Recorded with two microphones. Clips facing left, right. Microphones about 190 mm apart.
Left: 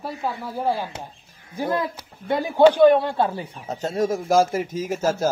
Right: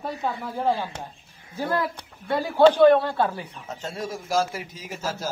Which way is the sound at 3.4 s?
40° left (ahead or behind).